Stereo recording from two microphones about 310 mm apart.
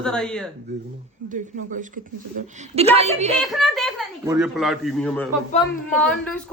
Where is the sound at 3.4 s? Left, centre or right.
Centre.